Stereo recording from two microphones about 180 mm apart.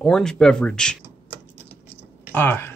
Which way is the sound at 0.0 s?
5° left (ahead or behind).